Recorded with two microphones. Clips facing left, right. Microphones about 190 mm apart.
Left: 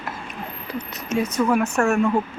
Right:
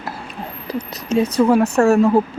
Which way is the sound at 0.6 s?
35° right (ahead or behind).